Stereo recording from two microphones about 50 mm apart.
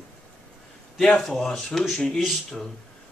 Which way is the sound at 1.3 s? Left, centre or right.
Centre.